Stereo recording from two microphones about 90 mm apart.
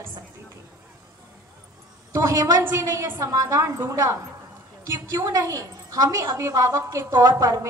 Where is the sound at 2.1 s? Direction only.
40° right (ahead or behind).